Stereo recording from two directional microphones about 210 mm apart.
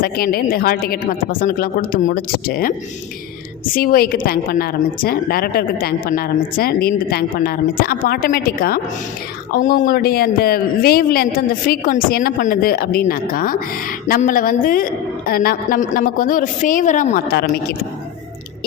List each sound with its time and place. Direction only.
0.0 s a woman's voice: 45° left (ahead or behind)